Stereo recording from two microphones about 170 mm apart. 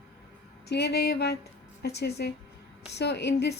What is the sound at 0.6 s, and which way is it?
A woman's voice, 75° left (ahead or behind).